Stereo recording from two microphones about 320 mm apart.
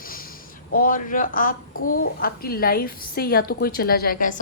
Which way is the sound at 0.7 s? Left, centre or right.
Left.